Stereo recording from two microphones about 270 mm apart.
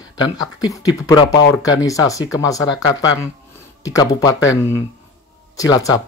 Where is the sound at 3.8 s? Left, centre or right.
Centre.